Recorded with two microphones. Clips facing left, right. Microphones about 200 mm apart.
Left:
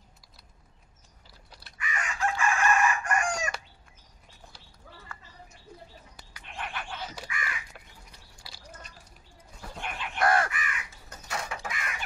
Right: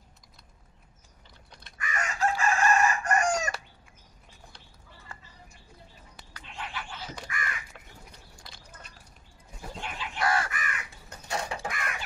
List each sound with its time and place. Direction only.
1.8 s chicken: 40° right (ahead or behind)
6.5 s a sound: 55° left (ahead or behind)
7.3 s crow: 40° right (ahead or behind)
7.7 s crow: 5° left (ahead or behind)
8.5 s a sound: 5° left (ahead or behind)
9.8 s chicken: 55° left (ahead or behind)
10.5 s crow: 45° right (ahead or behind)
11.1 s mechanisms: 30° right (ahead or behind)